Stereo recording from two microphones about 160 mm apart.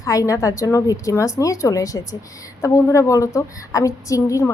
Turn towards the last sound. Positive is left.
turn(degrees=20)  # may be behind; listen again after turning